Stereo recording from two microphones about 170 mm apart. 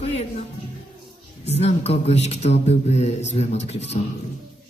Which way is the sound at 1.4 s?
40° left (ahead or behind).